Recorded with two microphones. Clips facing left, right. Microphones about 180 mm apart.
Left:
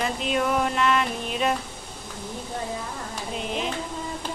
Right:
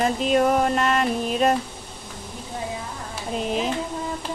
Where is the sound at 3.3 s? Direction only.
40° right (ahead or behind).